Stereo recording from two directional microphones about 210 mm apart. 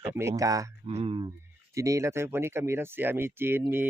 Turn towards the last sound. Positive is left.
turn(degrees=-10)  # may be behind; listen again after turning